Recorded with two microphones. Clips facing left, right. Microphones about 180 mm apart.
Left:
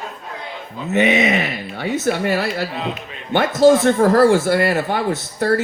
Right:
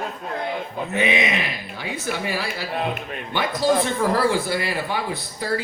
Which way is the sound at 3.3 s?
45° left (ahead or behind).